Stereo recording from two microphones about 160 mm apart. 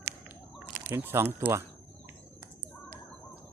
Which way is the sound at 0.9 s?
15° right (ahead or behind).